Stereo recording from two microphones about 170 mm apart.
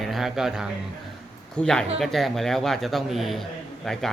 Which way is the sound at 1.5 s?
5° left (ahead or behind).